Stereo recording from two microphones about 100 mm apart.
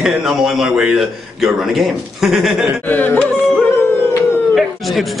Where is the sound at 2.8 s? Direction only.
15° left (ahead or behind).